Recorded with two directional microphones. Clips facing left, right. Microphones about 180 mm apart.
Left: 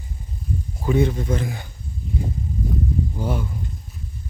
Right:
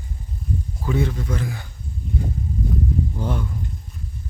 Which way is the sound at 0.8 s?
20° left (ahead or behind).